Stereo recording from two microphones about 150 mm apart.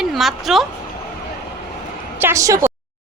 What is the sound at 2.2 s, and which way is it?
Speech, 20° right (ahead or behind).